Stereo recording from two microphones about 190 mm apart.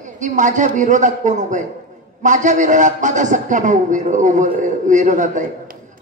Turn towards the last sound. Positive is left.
turn(degrees=-40)  # may be behind; listen again after turning